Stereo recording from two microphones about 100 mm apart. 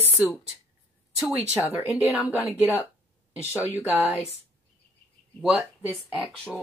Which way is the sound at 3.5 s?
20° right (ahead or behind).